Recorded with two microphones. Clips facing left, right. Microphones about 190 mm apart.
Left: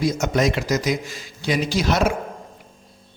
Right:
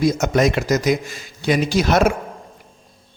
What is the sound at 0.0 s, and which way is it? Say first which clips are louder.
A man's voice: right 3 dB; 50° right (ahead or behind).